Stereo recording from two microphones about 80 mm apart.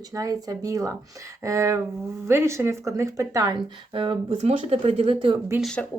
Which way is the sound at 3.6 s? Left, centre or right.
Right.